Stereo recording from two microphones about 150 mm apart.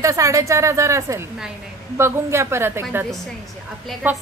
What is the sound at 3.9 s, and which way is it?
Speech, centre (ahead or behind).